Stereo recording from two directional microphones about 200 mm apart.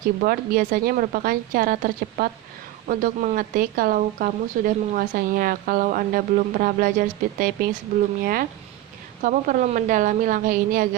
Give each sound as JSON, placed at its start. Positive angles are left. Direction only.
{"t": 0.2, "sound": "a woman's voice", "side_deg": -45}